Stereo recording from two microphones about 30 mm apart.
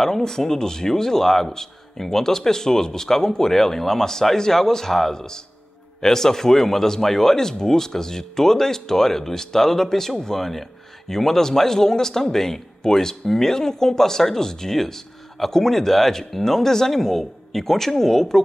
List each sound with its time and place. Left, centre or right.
0.2 s speech: centre
14.8 s speech: centre